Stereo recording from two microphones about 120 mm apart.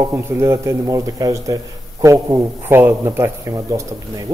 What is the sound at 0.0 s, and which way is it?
A man's voice, 20° right (ahead or behind).